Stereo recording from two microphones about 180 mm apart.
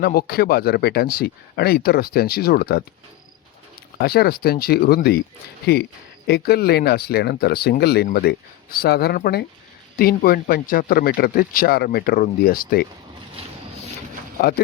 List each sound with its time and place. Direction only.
0.0 s speech: 60° left (ahead or behind)
3.9 s speech: 60° left (ahead or behind)
6.2 s speech: 60° left (ahead or behind)
13.4 s a sound: 30° right (ahead or behind)